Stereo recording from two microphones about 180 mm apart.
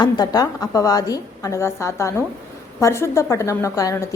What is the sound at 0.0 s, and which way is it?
A woman's voice, 20° left (ahead or behind).